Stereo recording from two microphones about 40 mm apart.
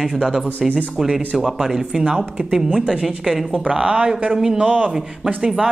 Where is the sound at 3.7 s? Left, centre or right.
Centre.